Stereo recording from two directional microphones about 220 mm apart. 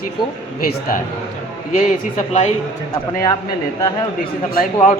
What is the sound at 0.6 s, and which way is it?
Speech, 40° left (ahead or behind).